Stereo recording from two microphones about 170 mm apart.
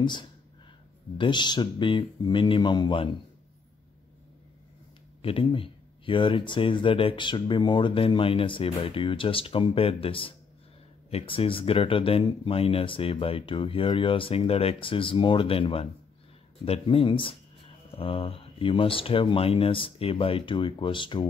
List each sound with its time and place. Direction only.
0.0 s speech: 25° left (ahead or behind)
5.2 s speech: 30° left (ahead or behind)